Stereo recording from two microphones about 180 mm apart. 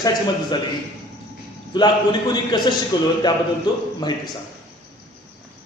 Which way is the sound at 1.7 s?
25° left (ahead or behind).